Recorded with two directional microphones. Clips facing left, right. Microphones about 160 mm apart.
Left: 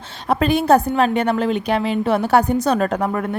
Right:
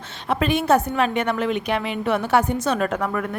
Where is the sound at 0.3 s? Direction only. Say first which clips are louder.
Left 4 dB; 35° left (ahead or behind).